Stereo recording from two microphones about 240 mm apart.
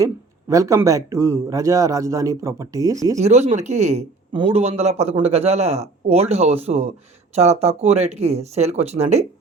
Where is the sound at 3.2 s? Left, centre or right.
Right.